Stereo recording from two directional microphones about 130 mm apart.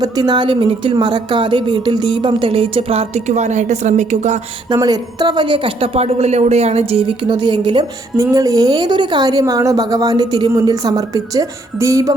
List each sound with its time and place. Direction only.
0.0 s speech: 30° right (ahead or behind); by 4.4 s 65° right (ahead or behind)
4.7 s speech: 30° right (ahead or behind)
8.1 s a woman's voice: 25° right (ahead or behind)